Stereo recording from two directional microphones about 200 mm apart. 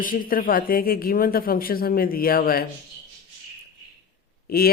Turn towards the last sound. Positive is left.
turn(degrees=50)  # may be behind; listen again after turning